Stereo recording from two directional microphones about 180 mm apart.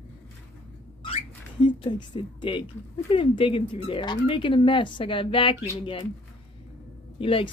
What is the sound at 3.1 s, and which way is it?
Speech, 30° left (ahead or behind).